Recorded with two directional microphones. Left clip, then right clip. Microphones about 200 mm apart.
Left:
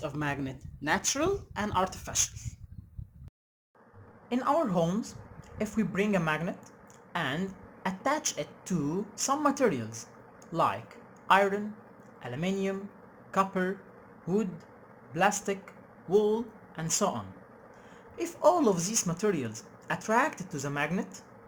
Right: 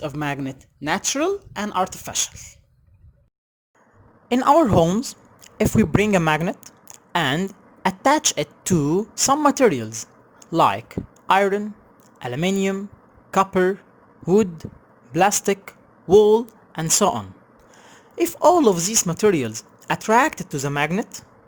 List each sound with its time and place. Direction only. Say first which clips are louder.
0.0 s speech: right 7 dB; 35° right (ahead or behind)
4.3 s a woman's voice: right 12 dB; 55° right (ahead or behind)